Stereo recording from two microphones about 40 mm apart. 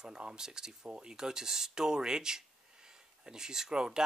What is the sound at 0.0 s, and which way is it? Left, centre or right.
Speech, right.